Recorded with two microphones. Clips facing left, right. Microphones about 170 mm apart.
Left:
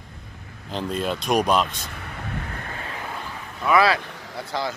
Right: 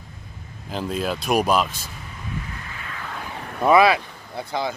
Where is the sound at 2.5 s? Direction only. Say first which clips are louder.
Left 3 dB; 50° left (ahead or behind).